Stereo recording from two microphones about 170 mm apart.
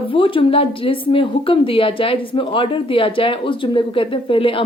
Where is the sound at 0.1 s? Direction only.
30° left (ahead or behind).